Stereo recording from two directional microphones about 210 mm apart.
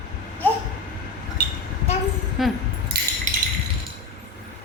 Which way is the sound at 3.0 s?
50° right (ahead or behind).